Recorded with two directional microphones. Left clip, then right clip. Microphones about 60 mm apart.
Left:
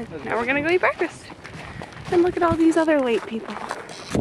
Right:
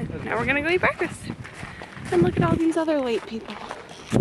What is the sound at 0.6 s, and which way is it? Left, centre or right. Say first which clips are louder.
Speech: left 2 dB; centre.